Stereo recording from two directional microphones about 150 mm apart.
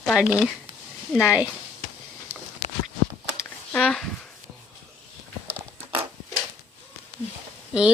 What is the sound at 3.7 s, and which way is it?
Speech, 5° left (ahead or behind).